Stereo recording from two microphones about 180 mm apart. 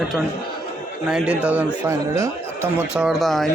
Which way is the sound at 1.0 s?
5° right (ahead or behind).